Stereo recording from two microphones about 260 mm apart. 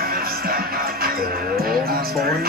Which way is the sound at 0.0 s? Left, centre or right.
Right.